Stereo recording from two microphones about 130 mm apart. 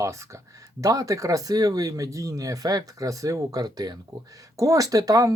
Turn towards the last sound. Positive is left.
turn(degrees=-25)  # may be behind; listen again after turning